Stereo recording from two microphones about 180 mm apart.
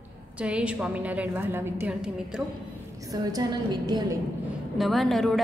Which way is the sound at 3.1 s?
20° right (ahead or behind).